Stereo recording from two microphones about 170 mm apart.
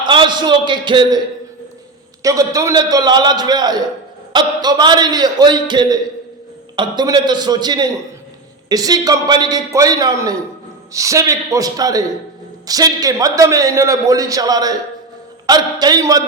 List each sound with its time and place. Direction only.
0.0 s a man's voice: 25° right (ahead or behind)
2.2 s a man's voice: 20° right (ahead or behind)